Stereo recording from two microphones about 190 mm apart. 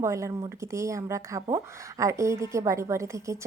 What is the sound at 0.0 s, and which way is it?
Speech, 15° right (ahead or behind).